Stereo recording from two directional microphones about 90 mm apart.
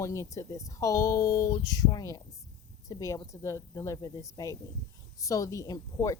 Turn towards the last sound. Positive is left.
turn(degrees=40)  # may be behind; listen again after turning